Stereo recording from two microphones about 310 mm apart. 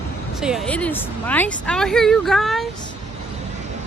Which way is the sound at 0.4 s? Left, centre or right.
Centre.